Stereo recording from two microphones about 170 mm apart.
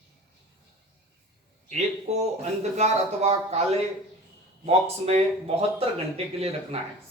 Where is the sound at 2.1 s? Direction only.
40° right (ahead or behind).